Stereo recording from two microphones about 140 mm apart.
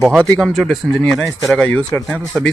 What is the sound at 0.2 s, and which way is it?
Speech, 5° left (ahead or behind).